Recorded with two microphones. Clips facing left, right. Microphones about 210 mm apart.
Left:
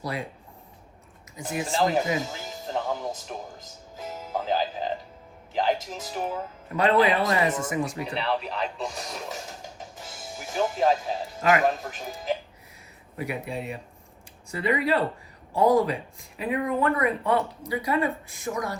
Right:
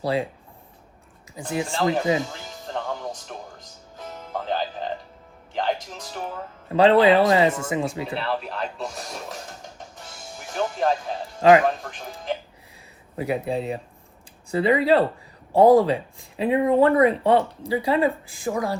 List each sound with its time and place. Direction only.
0.0 s speech: 30° right (ahead or behind)
1.6 s speech: centre (ahead or behind)
2.3 s music: centre (ahead or behind)
5.8 s speech: centre (ahead or behind)
6.7 s speech: 30° right (ahead or behind)
8.1 s speech: centre (ahead or behind)
13.2 s speech: 35° right (ahead or behind)